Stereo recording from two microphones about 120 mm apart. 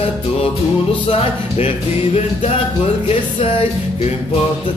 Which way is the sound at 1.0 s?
55° left (ahead or behind).